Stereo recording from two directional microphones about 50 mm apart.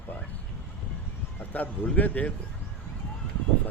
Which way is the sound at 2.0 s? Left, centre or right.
Left.